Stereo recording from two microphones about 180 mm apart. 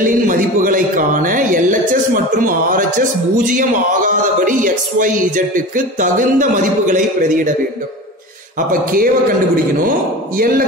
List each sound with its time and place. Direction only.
0.0 s a man's voice: 45° right (ahead or behind)
8.5 s a man's voice: 50° right (ahead or behind)